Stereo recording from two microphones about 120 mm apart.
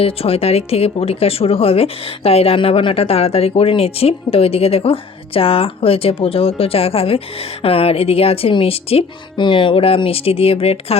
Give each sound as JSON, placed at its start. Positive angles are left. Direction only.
{"t": 0.0, "sound": "speech", "side_deg": 55}